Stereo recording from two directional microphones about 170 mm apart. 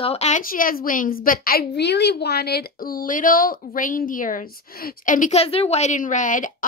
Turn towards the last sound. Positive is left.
turn(degrees=50)  # may be behind; listen again after turning